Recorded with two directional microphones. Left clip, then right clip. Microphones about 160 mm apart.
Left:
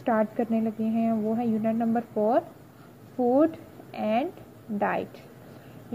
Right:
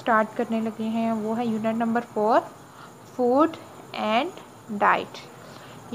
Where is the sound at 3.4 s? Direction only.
15° left (ahead or behind).